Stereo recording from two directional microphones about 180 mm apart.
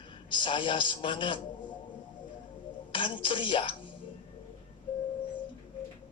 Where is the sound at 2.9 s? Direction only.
30° left (ahead or behind).